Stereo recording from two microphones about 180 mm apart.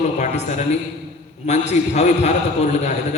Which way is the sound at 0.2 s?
40° left (ahead or behind).